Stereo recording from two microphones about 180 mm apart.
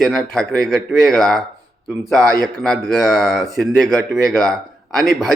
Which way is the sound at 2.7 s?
5° left (ahead or behind).